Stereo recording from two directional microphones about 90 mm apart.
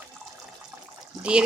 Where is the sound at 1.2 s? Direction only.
10° right (ahead or behind).